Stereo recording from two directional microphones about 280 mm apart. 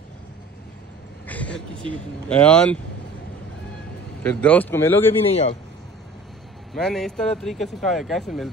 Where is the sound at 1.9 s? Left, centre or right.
Centre.